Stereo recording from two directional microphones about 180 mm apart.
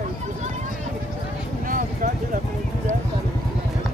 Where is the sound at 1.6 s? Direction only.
50° right (ahead or behind).